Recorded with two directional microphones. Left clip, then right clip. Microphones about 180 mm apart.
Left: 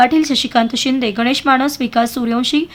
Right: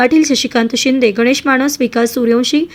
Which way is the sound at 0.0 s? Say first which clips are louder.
Right 1 dB; 15° right (ahead or behind).